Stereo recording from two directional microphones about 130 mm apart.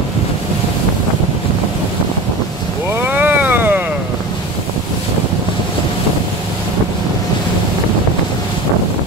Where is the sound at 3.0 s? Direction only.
15° right (ahead or behind).